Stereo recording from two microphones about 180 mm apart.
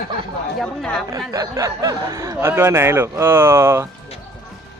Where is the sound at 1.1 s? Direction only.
20° right (ahead or behind).